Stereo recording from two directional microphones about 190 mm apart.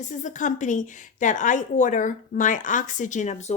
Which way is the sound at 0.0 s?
40° left (ahead or behind).